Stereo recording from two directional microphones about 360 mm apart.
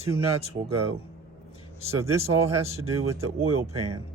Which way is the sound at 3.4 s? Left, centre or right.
Right.